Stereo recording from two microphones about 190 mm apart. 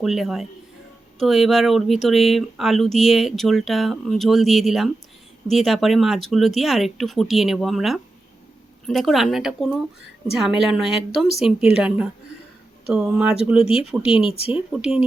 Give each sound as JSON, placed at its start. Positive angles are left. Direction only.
{"t": 0.0, "sound": "speech", "side_deg": 0}
{"t": 14.3, "sound": "speech", "side_deg": 30}
{"t": 14.5, "sound": "speech", "side_deg": -5}